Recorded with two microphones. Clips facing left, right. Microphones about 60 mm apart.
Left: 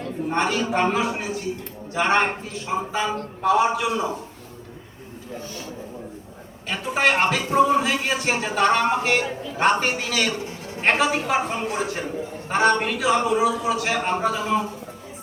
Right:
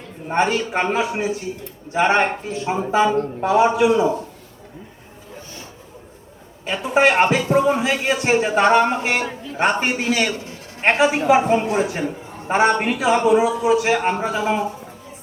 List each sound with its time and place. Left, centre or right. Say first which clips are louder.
0.3 s a man's voice: right 4 dB; right
0.7 s a man's voice: even; right
0.9 s a man's voice: right 3 dB; right
6.7 s a man's voice: right 5 dB; centre